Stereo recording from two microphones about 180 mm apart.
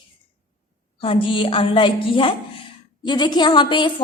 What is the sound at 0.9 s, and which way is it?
A woman's voice, 30° left (ahead or behind).